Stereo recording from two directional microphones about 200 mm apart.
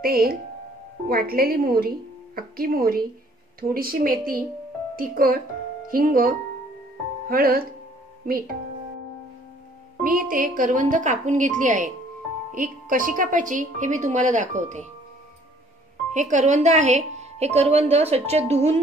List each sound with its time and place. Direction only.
0.0 s a woman's voice: 50° right (ahead or behind)
10.0 s a woman's voice: 45° right (ahead or behind)
16.1 s a woman's voice: 35° right (ahead or behind)